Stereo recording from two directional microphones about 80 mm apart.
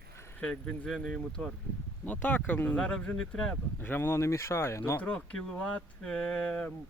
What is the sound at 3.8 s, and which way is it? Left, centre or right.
Speech, left.